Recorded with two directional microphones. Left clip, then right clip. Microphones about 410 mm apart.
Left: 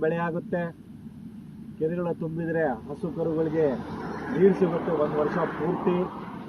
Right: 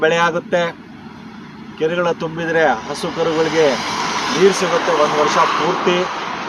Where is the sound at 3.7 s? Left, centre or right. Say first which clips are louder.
Right 15 dB; right.